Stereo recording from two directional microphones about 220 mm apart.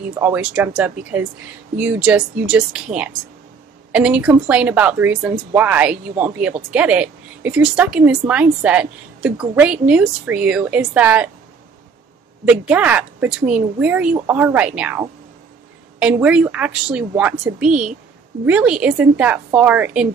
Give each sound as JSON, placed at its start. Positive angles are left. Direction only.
{"t": 0.2, "sound": "a woman's voice", "side_deg": -5}
{"t": 12.4, "sound": "a woman's voice", "side_deg": -5}